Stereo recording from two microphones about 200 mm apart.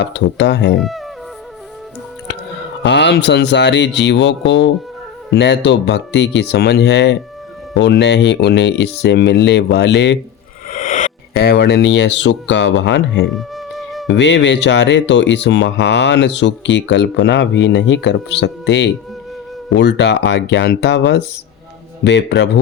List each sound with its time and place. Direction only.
0.0 s speech: 60° left (ahead or behind)
0.8 s speech: centre (ahead or behind)
2.8 s speech: 60° left (ahead or behind)
10.7 s speech: 40° left (ahead or behind); by 13.2 s 60° left (ahead or behind)
13.3 s music: centre (ahead or behind)
14.1 s speech: 60° left (ahead or behind)